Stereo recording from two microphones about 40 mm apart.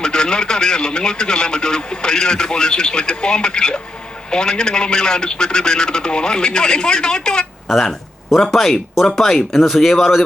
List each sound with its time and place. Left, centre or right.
0.0 s speech: centre
7.7 s speech: centre